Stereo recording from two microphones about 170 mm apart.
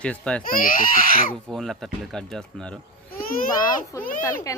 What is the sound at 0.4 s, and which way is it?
Speech, 55° left (ahead or behind).